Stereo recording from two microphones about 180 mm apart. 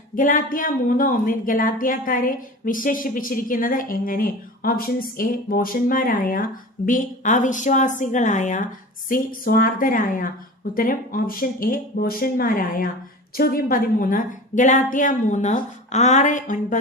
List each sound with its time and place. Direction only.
0.2 s speech: 50° left (ahead or behind)